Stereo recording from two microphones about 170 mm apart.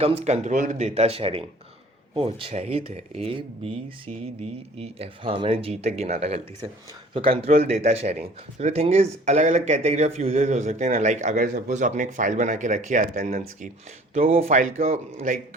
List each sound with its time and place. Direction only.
0.0 s speech: 35° right (ahead or behind)